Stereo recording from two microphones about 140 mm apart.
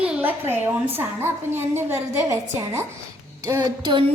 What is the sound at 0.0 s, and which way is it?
A woman's voice, 10° right (ahead or behind).